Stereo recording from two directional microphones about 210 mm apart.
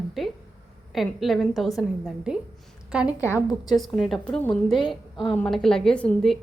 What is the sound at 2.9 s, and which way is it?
Speech, 5° right (ahead or behind).